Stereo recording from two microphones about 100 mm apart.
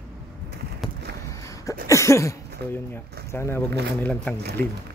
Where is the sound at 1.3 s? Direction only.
30° left (ahead or behind).